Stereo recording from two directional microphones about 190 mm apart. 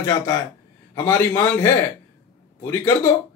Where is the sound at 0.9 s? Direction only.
15° left (ahead or behind).